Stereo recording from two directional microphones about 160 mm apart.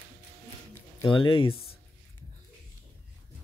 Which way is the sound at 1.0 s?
30° left (ahead or behind).